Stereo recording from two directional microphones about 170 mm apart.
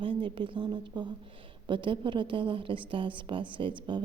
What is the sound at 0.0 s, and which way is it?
A woman's voice, 30° right (ahead or behind).